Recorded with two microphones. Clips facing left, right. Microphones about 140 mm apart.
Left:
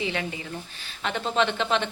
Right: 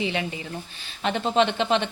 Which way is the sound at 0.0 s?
20° right (ahead or behind).